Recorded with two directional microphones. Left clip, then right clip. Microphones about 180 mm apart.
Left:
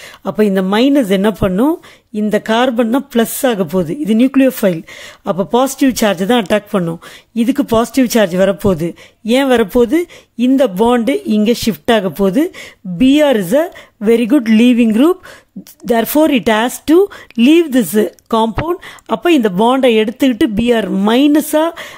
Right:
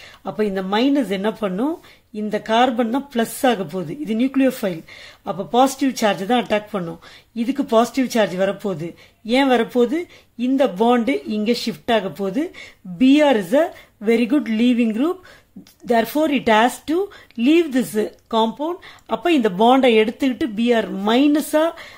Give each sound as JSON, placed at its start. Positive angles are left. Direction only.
{"t": 0.2, "sound": "speech", "side_deg": 50}